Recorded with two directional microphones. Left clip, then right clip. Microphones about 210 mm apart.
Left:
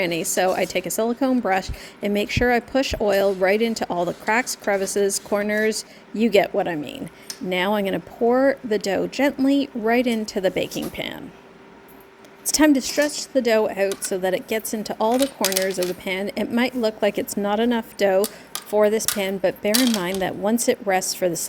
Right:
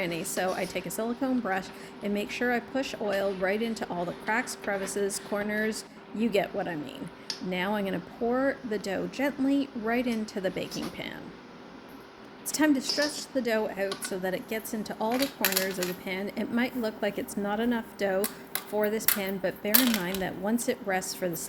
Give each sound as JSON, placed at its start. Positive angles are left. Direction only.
{"t": 0.0, "sound": "speech", "side_deg": 45}
{"t": 12.5, "sound": "speech", "side_deg": 45}